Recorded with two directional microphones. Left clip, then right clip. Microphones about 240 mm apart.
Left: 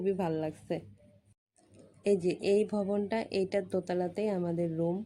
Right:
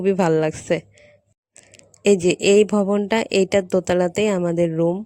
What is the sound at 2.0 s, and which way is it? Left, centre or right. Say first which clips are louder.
Speech: right 12 dB; right.